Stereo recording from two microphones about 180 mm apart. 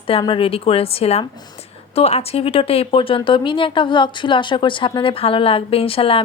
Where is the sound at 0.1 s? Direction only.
30° left (ahead or behind).